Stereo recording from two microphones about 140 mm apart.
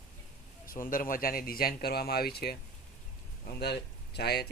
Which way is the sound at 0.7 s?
80° left.